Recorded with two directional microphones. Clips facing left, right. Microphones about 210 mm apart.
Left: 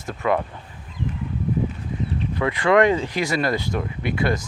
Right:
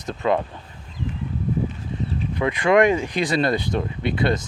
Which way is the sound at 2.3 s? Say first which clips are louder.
Even; 15° right (ahead or behind).